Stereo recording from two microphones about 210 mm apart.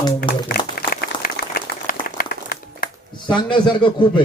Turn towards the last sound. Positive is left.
turn(degrees=25)  # may be behind; listen again after turning